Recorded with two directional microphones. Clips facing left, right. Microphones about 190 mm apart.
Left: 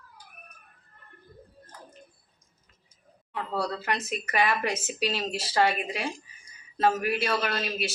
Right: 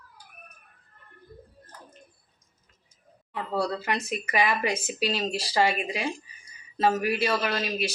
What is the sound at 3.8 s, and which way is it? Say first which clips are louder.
A man's voice: right 1 dB; centre (ahead or behind).